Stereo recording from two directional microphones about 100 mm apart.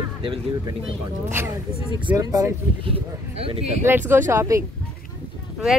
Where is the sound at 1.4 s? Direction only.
25° right (ahead or behind).